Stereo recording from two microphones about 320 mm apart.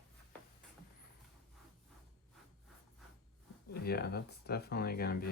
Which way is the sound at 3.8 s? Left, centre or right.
Left.